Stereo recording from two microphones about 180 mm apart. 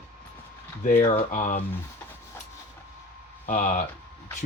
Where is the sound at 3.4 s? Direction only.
45° left (ahead or behind).